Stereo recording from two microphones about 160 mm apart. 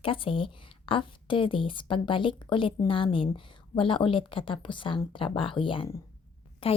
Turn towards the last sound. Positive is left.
turn(degrees=35)  # may be behind; listen again after turning